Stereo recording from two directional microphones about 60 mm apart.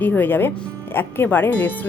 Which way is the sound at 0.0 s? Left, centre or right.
Left.